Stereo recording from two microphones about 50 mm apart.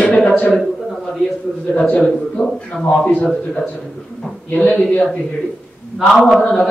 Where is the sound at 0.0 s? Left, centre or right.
Centre.